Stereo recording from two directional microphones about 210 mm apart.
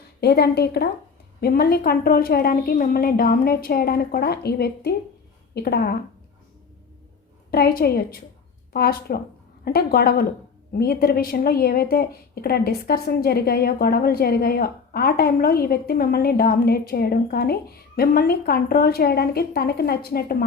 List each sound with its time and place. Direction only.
0.2 s a woman's voice: 50° left (ahead or behind)
7.5 s a woman's voice: 45° left (ahead or behind)